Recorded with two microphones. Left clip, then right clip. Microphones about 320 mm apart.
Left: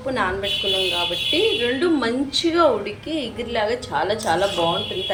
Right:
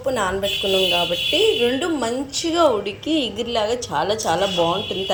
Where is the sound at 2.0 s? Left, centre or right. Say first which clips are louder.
Left 2 dB; right.